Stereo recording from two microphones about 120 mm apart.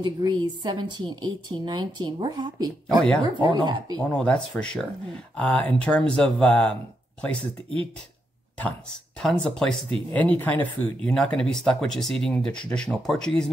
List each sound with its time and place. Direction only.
0.0 s a woman's voice: 35° right (ahead or behind)
4.0 s speech: 5° left (ahead or behind)
9.2 s speech: 5° left (ahead or behind)